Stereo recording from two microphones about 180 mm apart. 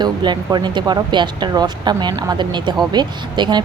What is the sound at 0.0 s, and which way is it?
Speech, 25° right (ahead or behind).